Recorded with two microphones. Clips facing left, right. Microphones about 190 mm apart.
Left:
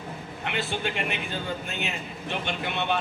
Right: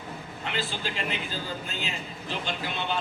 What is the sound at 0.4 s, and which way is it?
Speech, 60° left (ahead or behind).